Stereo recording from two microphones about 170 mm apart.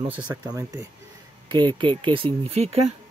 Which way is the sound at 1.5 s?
25° right (ahead or behind).